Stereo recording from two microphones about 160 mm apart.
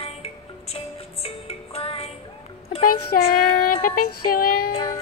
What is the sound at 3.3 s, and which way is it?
Child singing, 65° left (ahead or behind).